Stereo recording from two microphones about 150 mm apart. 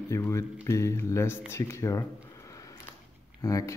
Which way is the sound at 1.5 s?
20° left (ahead or behind).